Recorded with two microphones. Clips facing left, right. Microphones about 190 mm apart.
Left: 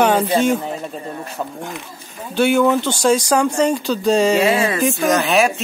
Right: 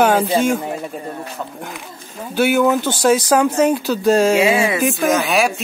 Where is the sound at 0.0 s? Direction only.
Centre (ahead or behind).